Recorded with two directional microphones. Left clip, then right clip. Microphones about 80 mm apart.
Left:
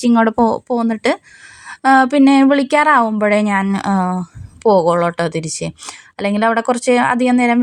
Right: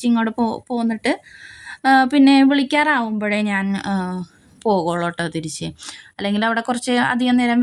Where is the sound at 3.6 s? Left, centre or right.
Left.